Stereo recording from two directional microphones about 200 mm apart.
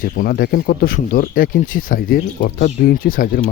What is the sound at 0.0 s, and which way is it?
Speech, 45° left (ahead or behind).